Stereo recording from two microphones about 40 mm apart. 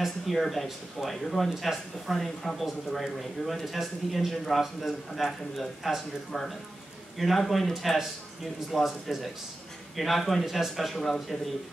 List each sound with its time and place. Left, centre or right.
0.3 s a man's voice: centre
6.3 s speech: centre
7.2 s a man's voice: centre